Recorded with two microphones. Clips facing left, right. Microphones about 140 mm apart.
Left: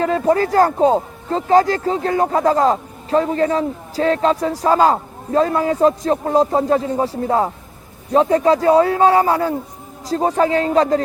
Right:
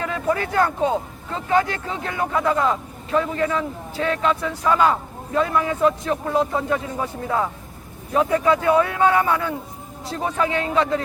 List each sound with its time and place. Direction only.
0.0 s speech: 35° left (ahead or behind)